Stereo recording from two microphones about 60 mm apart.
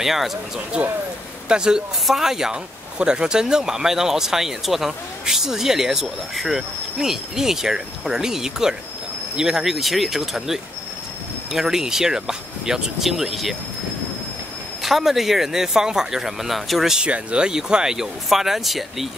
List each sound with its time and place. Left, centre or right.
0.0 s speech: centre
0.7 s speech: right; by 13.6 s centre
14.8 s speech: centre
17.0 s speech: centre